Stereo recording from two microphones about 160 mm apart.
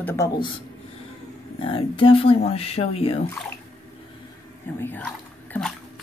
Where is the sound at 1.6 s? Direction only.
35° left (ahead or behind).